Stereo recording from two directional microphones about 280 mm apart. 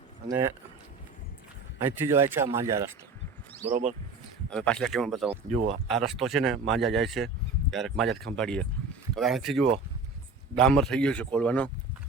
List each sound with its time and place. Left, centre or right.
0.3 s speech: centre
1.8 s speech: centre
3.7 s speech: right
4.4 s speech: centre
5.3 s speech: right
5.9 s speech: centre